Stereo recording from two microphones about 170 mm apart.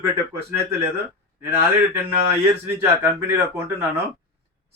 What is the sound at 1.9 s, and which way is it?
Speech, 15° right (ahead or behind).